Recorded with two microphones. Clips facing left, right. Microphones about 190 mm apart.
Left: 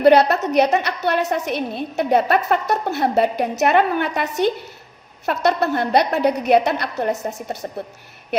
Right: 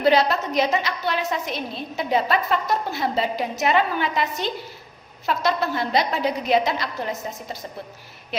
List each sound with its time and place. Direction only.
0.0 s a woman's voice: 60° left (ahead or behind)